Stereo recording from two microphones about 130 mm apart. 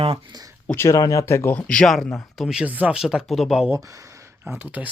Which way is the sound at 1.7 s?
5° left (ahead or behind).